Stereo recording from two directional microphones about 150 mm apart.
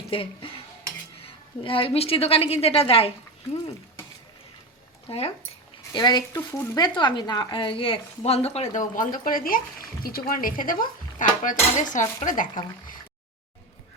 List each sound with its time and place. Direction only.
0.1 s dishes: 40° left (ahead or behind)
1.2 s a woman's voice: 35° left (ahead or behind)
5.0 s speech: 40° left (ahead or behind)
5.9 s speech: 30° left (ahead or behind); by 12.5 s 60° left (ahead or behind)